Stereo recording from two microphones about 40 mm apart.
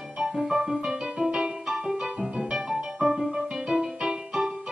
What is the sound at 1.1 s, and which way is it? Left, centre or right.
Music, right.